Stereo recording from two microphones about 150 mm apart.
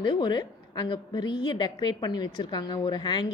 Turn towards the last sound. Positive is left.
turn(degrees=30)  # may be behind; listen again after turning